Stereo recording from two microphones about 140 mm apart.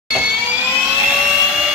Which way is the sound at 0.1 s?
10° right (ahead or behind).